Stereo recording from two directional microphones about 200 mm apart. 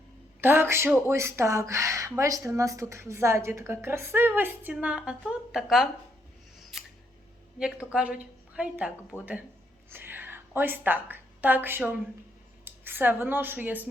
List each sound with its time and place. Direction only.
0.4 s speech: 10° right (ahead or behind)
6.6 s scissors: centre (ahead or behind)
7.6 s a woman's voice: 5° right (ahead or behind)